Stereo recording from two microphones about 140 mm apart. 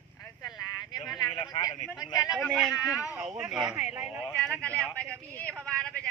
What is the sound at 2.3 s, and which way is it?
Speech, centre (ahead or behind).